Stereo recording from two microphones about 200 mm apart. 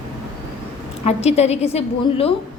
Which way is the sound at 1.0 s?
30° left (ahead or behind).